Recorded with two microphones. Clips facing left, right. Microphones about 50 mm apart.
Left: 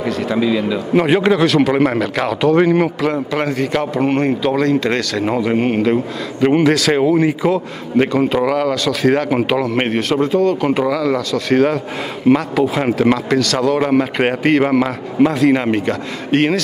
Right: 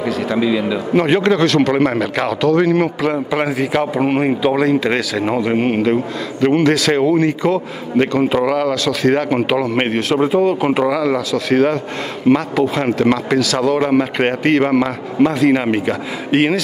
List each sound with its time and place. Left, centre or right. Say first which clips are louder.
0.0 s speech: even; centre
2.4 s a man's voice: left 1 dB; centre
2.8 s speech: even; centre
6.4 s a man's voice: left 1 dB; centre